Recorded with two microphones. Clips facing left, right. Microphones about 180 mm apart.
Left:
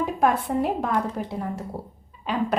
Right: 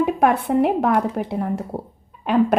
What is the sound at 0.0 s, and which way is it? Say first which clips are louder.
A woman's voice: right 4 dB; 65° right (ahead or behind).